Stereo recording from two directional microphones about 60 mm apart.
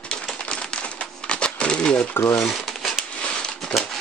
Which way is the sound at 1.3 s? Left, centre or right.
Centre.